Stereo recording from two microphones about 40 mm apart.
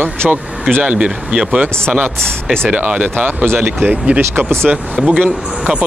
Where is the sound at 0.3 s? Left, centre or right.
Right.